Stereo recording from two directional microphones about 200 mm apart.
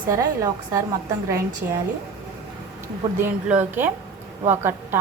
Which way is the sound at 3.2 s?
10° right (ahead or behind).